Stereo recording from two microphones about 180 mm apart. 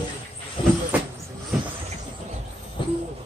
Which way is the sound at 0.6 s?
30° left (ahead or behind).